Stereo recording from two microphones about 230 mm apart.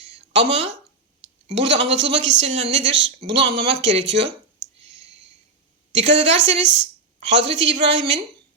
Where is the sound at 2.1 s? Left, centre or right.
Right.